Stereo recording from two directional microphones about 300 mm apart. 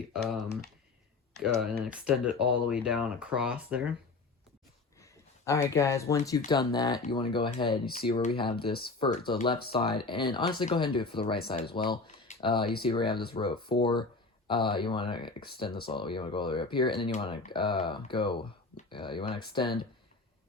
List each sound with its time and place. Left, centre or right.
0.1 s speech: centre
5.5 s speech: centre
7.7 s speech: left
8.0 s speech: centre